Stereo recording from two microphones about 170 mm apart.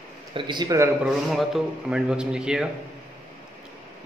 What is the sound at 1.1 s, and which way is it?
A man's voice, centre (ahead or behind).